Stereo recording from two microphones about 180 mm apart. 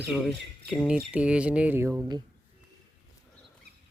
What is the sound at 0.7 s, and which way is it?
Speech, 5° right (ahead or behind).